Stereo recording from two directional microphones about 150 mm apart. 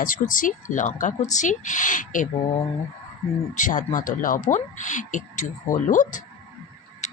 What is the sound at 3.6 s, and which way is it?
Speech, 60° left (ahead or behind).